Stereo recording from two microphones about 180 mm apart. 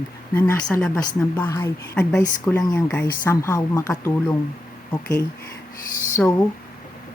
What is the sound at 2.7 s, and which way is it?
A woman's voice, 10° left (ahead or behind).